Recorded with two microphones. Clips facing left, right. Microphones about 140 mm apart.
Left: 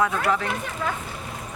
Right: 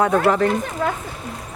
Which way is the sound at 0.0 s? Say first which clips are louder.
Right 7 dB; 40° right (ahead or behind).